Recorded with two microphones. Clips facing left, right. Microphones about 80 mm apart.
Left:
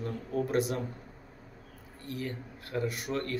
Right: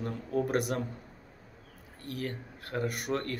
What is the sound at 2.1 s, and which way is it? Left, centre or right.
Speech, right.